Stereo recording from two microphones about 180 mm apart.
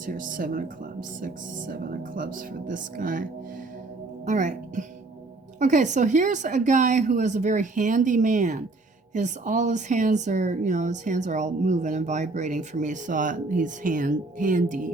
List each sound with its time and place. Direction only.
0.0 s speech: 50° right (ahead or behind)
4.3 s speech: 45° right (ahead or behind)